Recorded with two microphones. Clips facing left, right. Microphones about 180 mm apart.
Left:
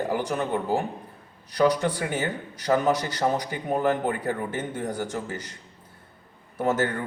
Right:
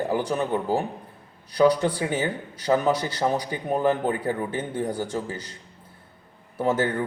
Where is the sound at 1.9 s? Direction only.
10° right (ahead or behind).